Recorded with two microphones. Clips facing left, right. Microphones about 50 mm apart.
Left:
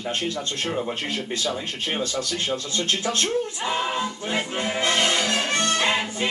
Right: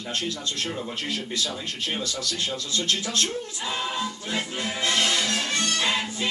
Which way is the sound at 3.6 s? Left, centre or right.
Left.